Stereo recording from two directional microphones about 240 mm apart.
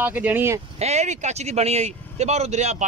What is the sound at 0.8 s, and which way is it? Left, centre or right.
Speech, right.